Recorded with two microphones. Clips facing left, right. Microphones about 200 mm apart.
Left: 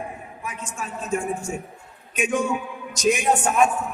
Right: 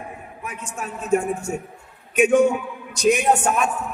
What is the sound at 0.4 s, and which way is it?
A man's voice, 60° right (ahead or behind).